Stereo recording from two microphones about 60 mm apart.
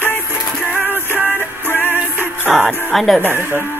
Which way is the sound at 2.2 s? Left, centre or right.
Right.